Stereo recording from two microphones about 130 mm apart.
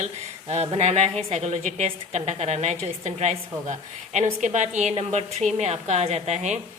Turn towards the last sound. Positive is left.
turn(degrees=-60)  # may be behind; listen again after turning